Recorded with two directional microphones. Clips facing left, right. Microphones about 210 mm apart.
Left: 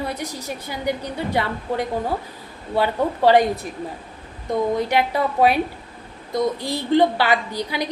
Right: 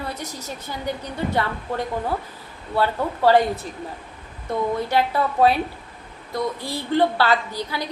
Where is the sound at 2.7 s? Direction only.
15° left (ahead or behind).